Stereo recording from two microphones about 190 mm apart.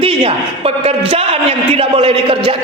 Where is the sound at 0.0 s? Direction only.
30° right (ahead or behind).